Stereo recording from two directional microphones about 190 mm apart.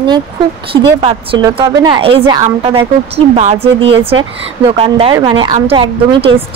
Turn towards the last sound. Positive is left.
turn(degrees=-30)  # may be behind; listen again after turning